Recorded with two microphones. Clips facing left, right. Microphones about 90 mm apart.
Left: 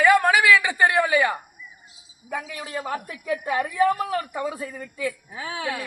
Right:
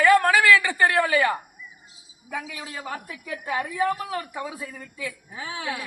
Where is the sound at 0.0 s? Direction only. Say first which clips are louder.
Even; 15° left (ahead or behind).